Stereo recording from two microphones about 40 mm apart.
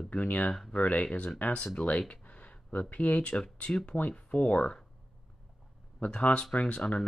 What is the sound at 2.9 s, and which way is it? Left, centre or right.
Speech, left.